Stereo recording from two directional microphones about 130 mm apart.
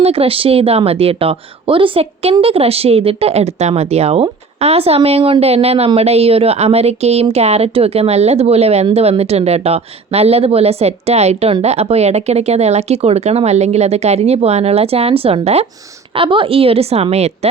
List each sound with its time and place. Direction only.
0.0 s speech: 50° right (ahead or behind)